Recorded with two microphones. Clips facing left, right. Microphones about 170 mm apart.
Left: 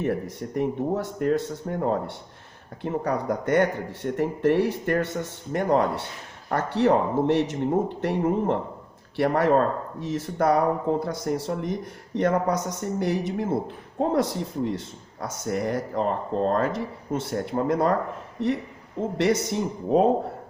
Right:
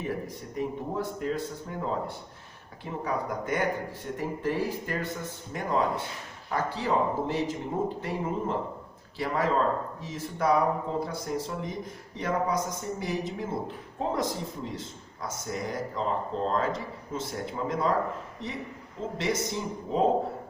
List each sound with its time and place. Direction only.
0.0 s speech: 70° left (ahead or behind)